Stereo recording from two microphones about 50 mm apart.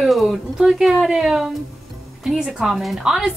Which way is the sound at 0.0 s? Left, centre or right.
Centre.